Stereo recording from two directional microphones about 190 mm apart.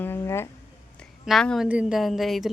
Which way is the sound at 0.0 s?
10° left (ahead or behind).